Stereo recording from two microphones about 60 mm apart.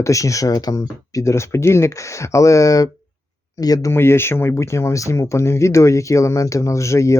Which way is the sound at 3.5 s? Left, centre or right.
Left.